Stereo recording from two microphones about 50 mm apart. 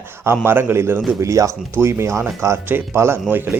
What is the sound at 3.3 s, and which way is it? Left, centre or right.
Speech, right.